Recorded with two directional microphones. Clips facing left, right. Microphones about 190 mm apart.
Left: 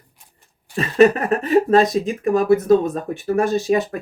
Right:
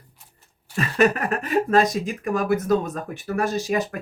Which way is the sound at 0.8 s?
30° left (ahead or behind).